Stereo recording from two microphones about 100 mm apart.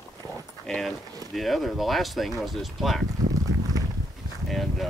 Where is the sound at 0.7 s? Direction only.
Centre (ahead or behind).